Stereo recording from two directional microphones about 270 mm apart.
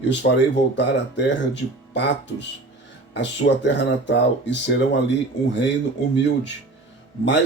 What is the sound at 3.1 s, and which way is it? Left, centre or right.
Speech, left.